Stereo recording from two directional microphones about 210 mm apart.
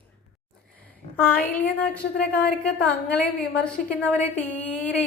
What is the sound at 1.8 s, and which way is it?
A woman's voice, 5° left (ahead or behind).